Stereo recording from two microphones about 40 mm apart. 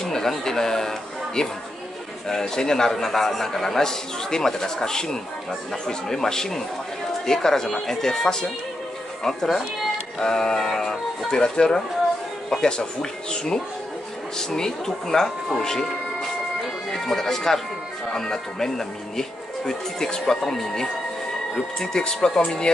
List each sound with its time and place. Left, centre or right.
0.0 s a man's voice: centre